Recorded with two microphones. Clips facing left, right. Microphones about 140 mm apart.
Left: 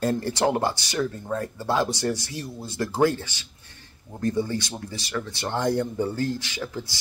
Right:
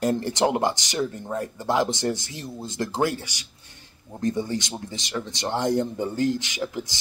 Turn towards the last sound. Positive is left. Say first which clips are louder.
# right 3 dB
turn(degrees=-15)  # may be behind; listen again after turning